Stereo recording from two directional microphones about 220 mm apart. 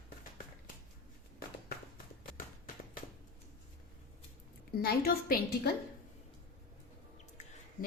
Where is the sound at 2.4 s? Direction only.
40° left (ahead or behind).